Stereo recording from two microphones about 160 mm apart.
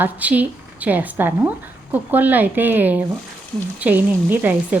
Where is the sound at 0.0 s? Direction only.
10° right (ahead or behind).